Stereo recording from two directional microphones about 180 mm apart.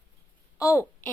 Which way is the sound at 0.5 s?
15° left (ahead or behind).